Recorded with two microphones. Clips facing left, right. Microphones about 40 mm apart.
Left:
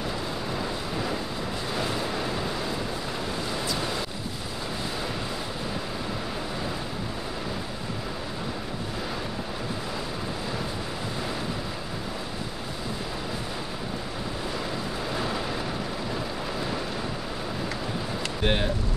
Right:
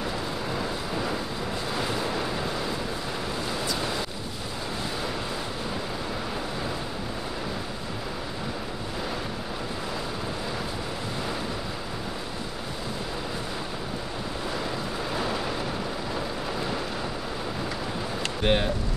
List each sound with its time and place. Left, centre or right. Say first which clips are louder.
0.6 s vehicle: right 1 dB; centre
18.4 s vehicle: right 2 dB; centre